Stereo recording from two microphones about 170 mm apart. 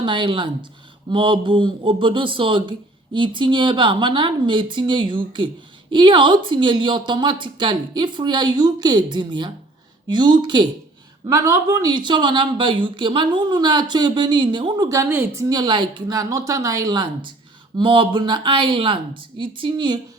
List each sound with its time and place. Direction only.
0.0 s speech: 30° right (ahead or behind)